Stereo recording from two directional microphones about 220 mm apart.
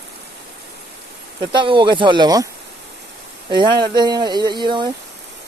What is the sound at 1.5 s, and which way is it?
Speech, 20° right (ahead or behind).